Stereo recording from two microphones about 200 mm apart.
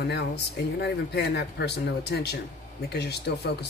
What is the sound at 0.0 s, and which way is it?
Speech, 55° left (ahead or behind).